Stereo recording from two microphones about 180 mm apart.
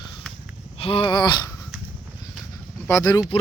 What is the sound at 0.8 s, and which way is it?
Speech, 30° left (ahead or behind).